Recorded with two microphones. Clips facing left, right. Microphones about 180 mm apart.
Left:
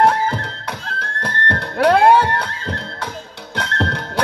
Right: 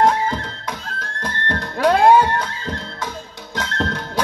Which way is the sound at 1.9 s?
65° left (ahead or behind).